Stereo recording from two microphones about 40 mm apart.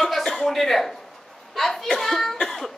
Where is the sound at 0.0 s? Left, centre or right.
Centre.